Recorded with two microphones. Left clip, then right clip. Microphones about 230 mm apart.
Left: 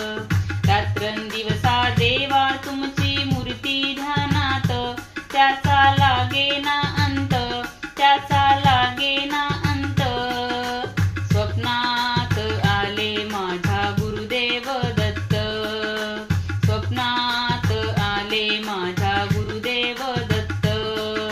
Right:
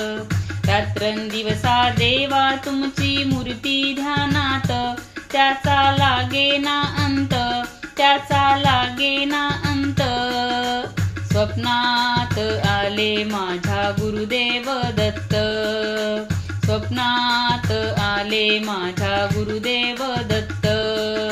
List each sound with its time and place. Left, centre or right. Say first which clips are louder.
0.7 s music: right 2 dB; right
3.6 s music: right 2 dB; right
8.0 s music: right 1 dB; right
16.9 s music: right 3 dB; right